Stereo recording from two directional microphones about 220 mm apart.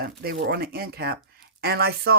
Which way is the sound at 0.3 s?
50° right (ahead or behind).